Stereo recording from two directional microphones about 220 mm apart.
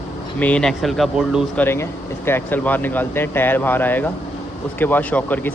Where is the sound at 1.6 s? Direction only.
10° left (ahead or behind).